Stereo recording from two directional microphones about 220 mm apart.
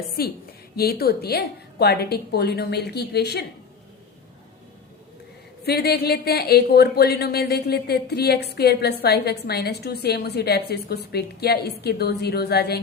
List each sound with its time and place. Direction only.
0.2 s a woman's voice: 45° left (ahead or behind)
5.6 s a woman's voice: 45° left (ahead or behind)